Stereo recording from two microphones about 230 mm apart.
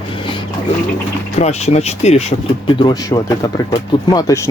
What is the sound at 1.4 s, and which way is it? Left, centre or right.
Speech, left.